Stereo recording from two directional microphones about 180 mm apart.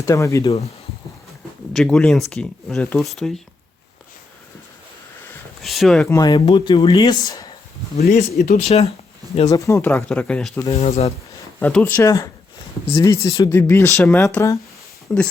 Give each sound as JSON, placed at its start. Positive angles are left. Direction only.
{"t": 0.0, "sound": "speech", "side_deg": 15}
{"t": 1.7, "sound": "speech", "side_deg": 5}
{"t": 5.6, "sound": "speech", "side_deg": 0}
{"t": 6.1, "sound": "speech", "side_deg": 20}
{"t": 7.9, "sound": "speech", "side_deg": 55}
{"t": 8.6, "sound": "speech", "side_deg": 35}
{"t": 9.5, "sound": "speech", "side_deg": 15}
{"t": 10.7, "sound": "speech", "side_deg": 35}
{"t": 11.6, "sound": "speech", "side_deg": 10}
{"t": 15.1, "sound": "speech", "side_deg": 5}